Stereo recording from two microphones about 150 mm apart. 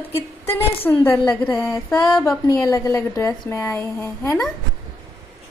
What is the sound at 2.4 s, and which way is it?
A woman's voice, 20° left (ahead or behind).